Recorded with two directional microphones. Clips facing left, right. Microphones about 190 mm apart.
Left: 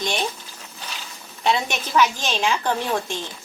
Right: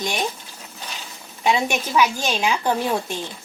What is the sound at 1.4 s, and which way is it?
A woman's voice, 10° right (ahead or behind).